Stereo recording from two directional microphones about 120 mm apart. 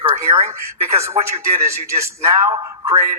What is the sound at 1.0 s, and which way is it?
A man's voice, 25° right (ahead or behind).